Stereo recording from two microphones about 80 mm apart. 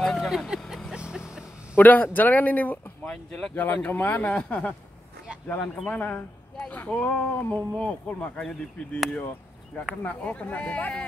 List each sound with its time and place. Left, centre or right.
0.0 s vehicle: centre
1.8 s speech: left
3.5 s speech: left
5.9 s speech: left
10.0 s speech: centre